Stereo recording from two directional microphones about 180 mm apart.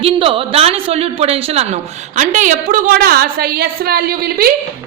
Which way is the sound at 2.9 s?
60° right (ahead or behind).